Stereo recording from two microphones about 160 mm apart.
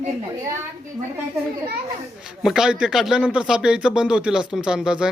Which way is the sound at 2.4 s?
5° right (ahead or behind).